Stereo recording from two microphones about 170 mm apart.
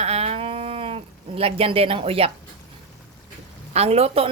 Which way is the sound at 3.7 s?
40° right (ahead or behind).